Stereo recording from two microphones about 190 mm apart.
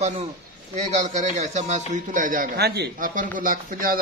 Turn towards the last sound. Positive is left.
turn(degrees=-45)  # may be behind; listen again after turning